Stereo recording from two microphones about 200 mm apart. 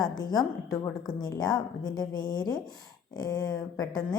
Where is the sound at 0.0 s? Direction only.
20° left (ahead or behind).